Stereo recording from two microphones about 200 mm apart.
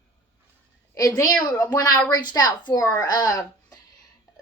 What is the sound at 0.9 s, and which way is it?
A woman's voice, 15° left (ahead or behind).